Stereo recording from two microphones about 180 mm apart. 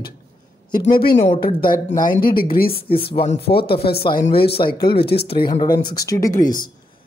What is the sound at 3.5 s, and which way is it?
Speech, 60° left (ahead or behind).